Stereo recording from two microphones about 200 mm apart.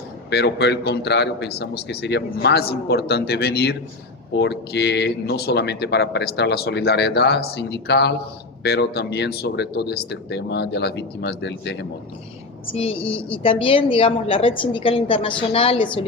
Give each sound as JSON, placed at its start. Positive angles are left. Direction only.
{"t": 0.3, "sound": "speech", "side_deg": 55}
{"t": 12.6, "sound": "a woman's voice", "side_deg": 30}